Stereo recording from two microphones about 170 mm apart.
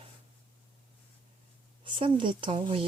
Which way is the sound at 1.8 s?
30° right (ahead or behind).